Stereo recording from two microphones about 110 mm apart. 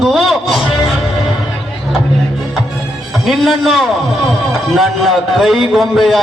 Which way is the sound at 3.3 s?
Centre (ahead or behind).